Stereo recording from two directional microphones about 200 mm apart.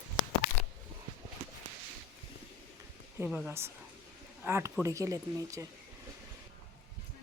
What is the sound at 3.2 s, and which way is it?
Speech, centre (ahead or behind).